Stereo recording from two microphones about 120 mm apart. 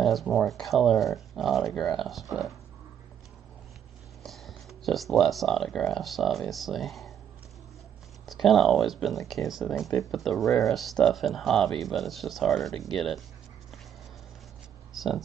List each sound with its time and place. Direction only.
0.0 s speech: centre (ahead or behind)
4.2 s speech: centre (ahead or behind)
8.3 s speech: centre (ahead or behind)
15.0 s speech: centre (ahead or behind)